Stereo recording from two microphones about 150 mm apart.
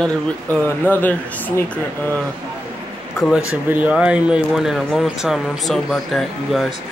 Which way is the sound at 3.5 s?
10° right (ahead or behind).